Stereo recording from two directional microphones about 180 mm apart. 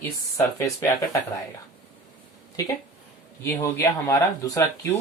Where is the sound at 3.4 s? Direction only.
15° left (ahead or behind).